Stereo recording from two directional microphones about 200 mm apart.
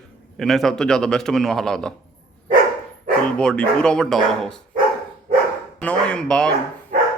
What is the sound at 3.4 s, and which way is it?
A man's voice, 5° left (ahead or behind).